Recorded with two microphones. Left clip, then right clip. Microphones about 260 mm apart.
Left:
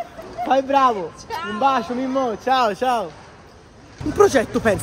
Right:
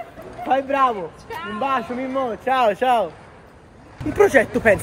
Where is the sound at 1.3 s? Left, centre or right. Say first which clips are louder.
Left 4 dB; left.